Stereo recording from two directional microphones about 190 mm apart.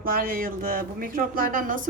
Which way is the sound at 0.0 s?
50° right (ahead or behind).